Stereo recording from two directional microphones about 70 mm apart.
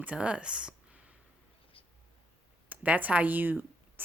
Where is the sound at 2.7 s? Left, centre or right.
Right.